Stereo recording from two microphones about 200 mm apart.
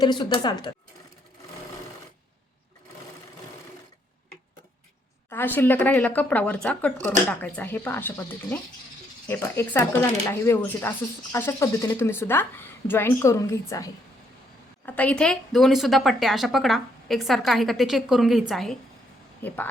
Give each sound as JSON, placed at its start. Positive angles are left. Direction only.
{"t": 0.0, "sound": "speech", "side_deg": 20}
{"t": 5.3, "sound": "a woman's voice", "side_deg": 10}